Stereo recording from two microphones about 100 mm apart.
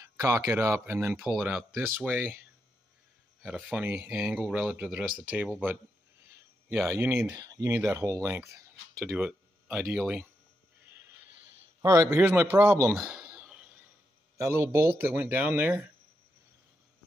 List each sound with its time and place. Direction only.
0.0 s speech: 30° right (ahead or behind)
1.1 s speech: 5° right (ahead or behind)
3.4 s speech: 10° right (ahead or behind)
7.2 s speech: 35° right (ahead or behind)
9.1 s a sound: 15° right (ahead or behind)
11.8 s speech: 30° right (ahead or behind)
12.9 s a sound: 5° right (ahead or behind)
14.3 s speech: 30° right (ahead or behind)